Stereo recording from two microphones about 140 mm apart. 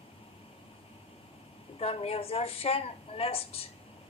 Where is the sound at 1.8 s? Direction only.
45° left (ahead or behind).